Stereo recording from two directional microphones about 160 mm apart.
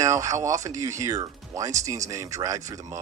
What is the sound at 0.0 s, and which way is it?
Speech, 20° right (ahead or behind).